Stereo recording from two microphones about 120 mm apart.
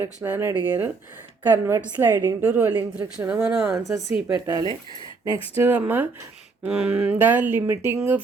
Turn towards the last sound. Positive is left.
turn(degrees=-20)  # may be behind; listen again after turning